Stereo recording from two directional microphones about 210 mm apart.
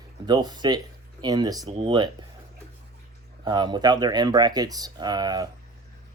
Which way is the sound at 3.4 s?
20° right (ahead or behind).